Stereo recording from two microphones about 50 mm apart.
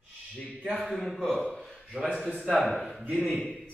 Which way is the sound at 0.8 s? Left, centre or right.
Centre.